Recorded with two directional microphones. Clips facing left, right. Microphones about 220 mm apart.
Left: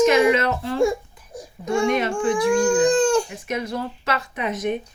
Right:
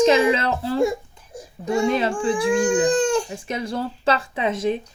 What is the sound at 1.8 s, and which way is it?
Speech, 30° right (ahead or behind).